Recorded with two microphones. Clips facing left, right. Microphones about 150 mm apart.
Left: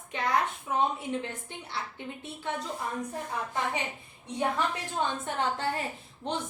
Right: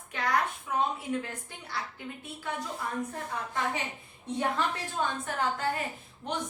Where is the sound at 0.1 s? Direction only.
25° left (ahead or behind).